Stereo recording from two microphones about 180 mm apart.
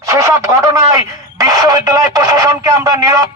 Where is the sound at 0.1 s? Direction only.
15° right (ahead or behind).